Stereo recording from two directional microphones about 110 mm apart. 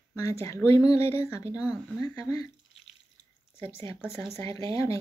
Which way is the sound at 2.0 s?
30° left (ahead or behind).